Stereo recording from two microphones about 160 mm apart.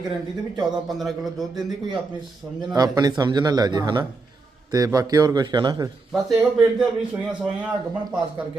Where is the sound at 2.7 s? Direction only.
25° right (ahead or behind).